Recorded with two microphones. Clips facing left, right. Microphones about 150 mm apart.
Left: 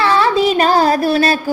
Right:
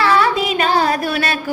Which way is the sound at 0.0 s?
25° left (ahead or behind).